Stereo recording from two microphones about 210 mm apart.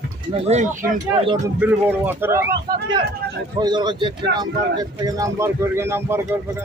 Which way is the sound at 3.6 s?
20° right (ahead or behind).